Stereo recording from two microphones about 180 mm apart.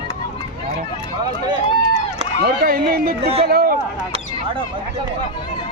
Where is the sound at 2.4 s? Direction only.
55° right (ahead or behind).